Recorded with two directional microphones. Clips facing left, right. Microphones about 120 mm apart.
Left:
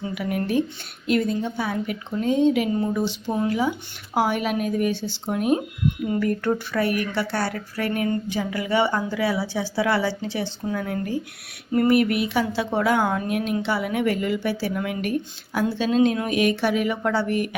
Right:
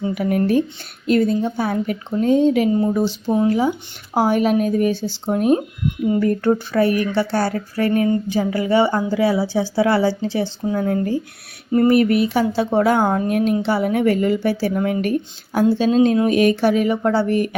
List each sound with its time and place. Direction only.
0.0 s speech: 40° right (ahead or behind)